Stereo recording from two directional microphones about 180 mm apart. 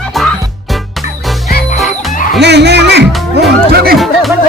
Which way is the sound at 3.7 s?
60° right (ahead or behind).